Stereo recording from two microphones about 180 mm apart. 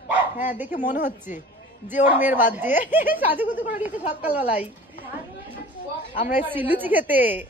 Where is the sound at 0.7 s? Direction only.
45° left (ahead or behind).